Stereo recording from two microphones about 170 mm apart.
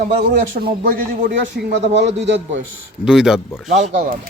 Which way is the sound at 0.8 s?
55° right (ahead or behind).